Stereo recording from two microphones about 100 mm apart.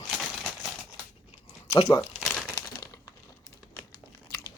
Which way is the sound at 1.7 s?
35° left (ahead or behind).